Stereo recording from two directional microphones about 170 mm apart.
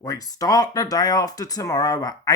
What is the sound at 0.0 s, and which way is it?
Speech, 20° left (ahead or behind).